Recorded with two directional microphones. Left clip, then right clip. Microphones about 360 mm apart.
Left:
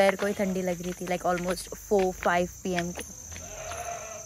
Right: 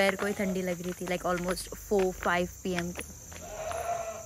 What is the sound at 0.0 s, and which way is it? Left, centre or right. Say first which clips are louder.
Speech: left 4 dB; centre.